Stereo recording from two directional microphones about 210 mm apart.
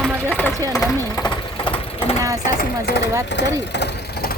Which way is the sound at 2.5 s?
45° left (ahead or behind).